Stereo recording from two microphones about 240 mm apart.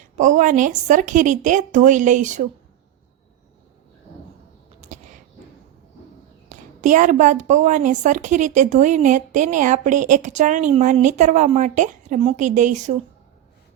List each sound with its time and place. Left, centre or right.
0.2 s a woman's voice: right
6.5 s a woman's voice: right